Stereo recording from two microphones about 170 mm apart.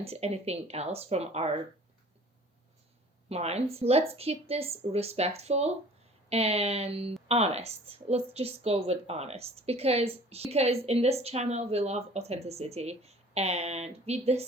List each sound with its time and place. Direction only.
0.0 s a woman's voice: 35° right (ahead or behind)
3.2 s a woman's voice: 40° right (ahead or behind)